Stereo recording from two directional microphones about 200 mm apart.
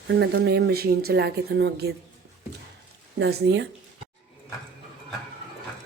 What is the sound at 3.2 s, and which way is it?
Speech, 60° right (ahead or behind).